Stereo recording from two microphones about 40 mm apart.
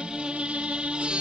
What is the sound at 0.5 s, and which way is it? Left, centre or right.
Music, right.